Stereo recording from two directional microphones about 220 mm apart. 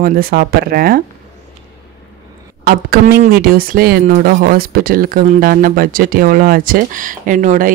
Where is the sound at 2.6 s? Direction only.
45° right (ahead or behind).